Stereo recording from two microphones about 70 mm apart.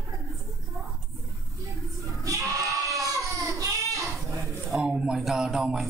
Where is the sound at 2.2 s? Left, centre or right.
Right.